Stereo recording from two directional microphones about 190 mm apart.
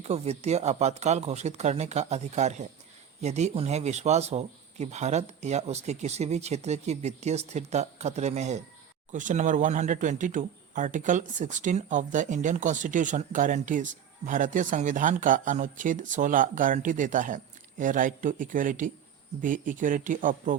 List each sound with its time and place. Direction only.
0.0 s speech: 35° right (ahead or behind)